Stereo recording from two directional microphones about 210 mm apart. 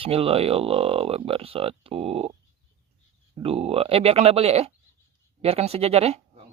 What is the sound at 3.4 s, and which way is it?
Speech, 25° right (ahead or behind).